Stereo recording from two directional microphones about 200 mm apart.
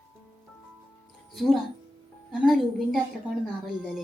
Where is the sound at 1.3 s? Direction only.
Centre (ahead or behind).